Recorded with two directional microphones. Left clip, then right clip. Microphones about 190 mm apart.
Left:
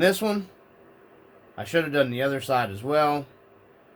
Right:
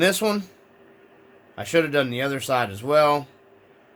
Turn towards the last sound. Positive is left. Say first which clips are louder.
# right 4 dB
turn(degrees=-45)  # may be behind; listen again after turning